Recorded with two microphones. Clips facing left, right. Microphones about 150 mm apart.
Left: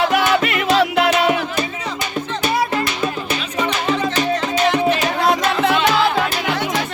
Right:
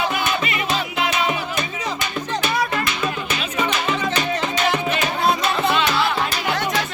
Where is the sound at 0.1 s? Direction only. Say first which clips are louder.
Left 6 dB; 75° left (ahead or behind).